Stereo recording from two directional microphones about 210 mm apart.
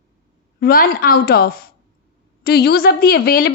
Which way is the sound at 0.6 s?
45° left (ahead or behind).